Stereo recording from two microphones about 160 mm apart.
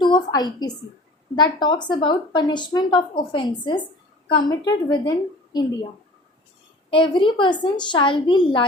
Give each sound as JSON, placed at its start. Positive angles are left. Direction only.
{"t": 0.0, "sound": "a woman's voice", "side_deg": 25}
{"t": 6.9, "sound": "a woman's voice", "side_deg": 30}